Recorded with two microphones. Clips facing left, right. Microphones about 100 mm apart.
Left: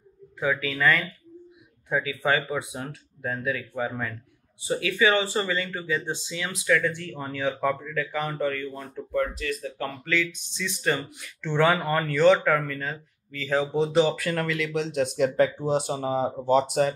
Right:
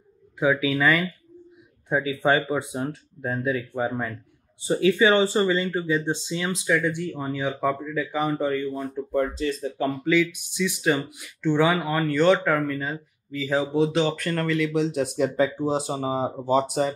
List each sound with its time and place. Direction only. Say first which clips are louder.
0.4 s speech: right 4 dB; 10° right (ahead or behind)
1.9 s speech: right 3 dB; 30° right (ahead or behind)
10.0 s speech: right 6 dB; 10° right (ahead or behind)